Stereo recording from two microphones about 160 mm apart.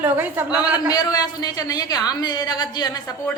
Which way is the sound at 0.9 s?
25° left (ahead or behind).